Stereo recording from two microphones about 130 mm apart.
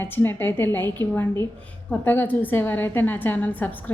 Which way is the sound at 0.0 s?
15° left (ahead or behind).